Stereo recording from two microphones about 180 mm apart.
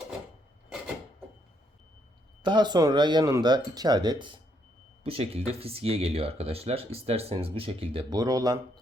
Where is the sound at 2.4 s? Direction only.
25° right (ahead or behind).